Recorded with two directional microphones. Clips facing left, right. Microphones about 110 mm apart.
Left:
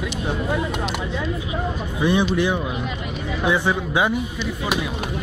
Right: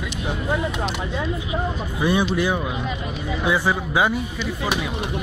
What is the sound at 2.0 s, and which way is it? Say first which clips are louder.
Speech: left 1 dB; 5° right (ahead or behind).